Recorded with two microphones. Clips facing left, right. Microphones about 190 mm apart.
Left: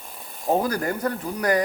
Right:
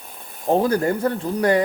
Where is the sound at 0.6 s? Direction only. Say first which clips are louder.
Right 5 dB; 25° right (ahead or behind).